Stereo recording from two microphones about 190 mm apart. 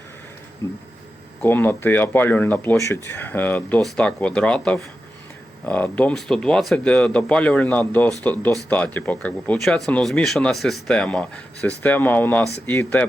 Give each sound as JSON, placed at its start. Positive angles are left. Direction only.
{"t": 0.6, "sound": "speech", "side_deg": 15}